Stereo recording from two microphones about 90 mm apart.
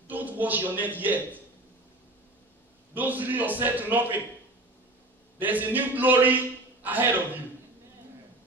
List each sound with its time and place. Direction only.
0.1 s a man's voice: 20° right (ahead or behind)
2.9 s a man's voice: 20° right (ahead or behind)
5.4 s a man's voice: 20° right (ahead or behind)